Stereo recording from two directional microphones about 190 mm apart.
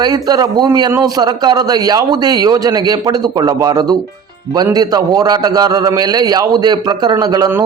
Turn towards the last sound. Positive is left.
turn(degrees=-15)  # may be behind; listen again after turning